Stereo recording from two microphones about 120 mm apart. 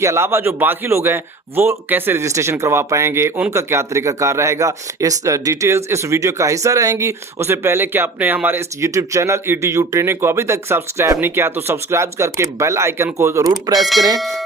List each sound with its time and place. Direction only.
0.0 s speech: 20° right (ahead or behind)
14.2 s speech: centre (ahead or behind)